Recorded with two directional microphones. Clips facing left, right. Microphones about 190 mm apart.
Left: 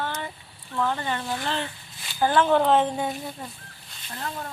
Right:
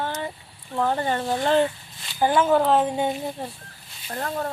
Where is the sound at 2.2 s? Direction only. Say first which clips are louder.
Right 1 dB; 10° right (ahead or behind).